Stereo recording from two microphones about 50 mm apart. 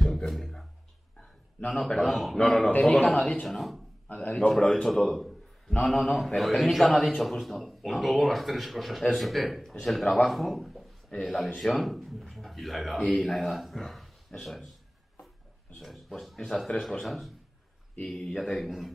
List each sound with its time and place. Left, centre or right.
0.3 s a sound: centre
1.7 s speech: centre
2.3 s a man's voice: centre
3.2 s a man's voice: left
3.4 s speech: centre
4.1 s a man's voice: left
4.5 s a man's voice: centre
4.8 s speech: centre
14.4 s a sound: centre
15.8 s speech: centre
17.0 s speech: centre
18.0 s a man's voice: centre
18.6 s speech: centre